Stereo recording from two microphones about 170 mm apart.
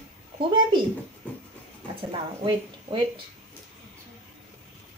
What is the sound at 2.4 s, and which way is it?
Speech, 30° right (ahead or behind).